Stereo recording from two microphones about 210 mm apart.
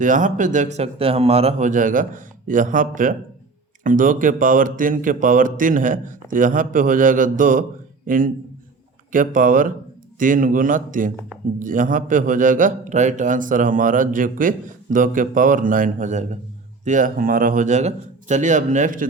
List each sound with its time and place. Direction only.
0.0 s a man's voice: 35° right (ahead or behind)